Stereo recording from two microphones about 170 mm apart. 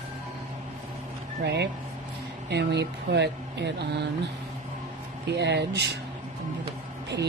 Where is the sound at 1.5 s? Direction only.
80° right.